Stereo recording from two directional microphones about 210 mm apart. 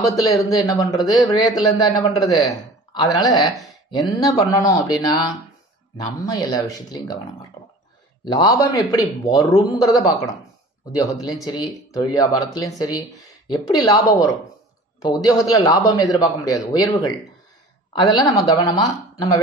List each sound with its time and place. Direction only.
0.0 s speech: 15° left (ahead or behind)
7.6 s a sound: 20° left (ahead or behind)
8.3 s speech: 20° left (ahead or behind)
11.0 s a woman's voice: 15° left (ahead or behind)